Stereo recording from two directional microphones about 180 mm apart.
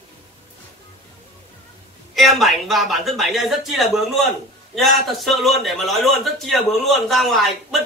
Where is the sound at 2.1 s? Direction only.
Centre (ahead or behind).